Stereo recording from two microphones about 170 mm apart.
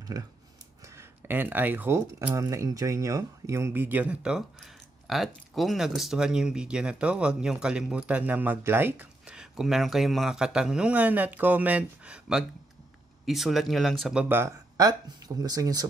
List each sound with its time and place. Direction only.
0.0 s speech: 20° right (ahead or behind); by 14.2 s centre (ahead or behind)
14.3 s speech: 15° right (ahead or behind)